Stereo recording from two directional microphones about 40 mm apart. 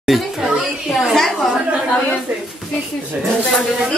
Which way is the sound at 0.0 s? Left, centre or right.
Centre.